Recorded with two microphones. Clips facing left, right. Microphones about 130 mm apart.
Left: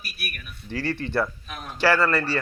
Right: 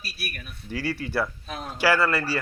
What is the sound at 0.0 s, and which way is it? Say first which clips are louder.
Speech: right 1 dB; 30° right (ahead or behind).